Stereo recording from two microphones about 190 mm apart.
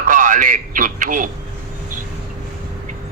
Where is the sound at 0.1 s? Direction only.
40° right (ahead or behind).